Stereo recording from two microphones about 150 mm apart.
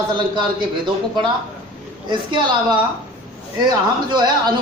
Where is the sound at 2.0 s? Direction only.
30° right (ahead or behind).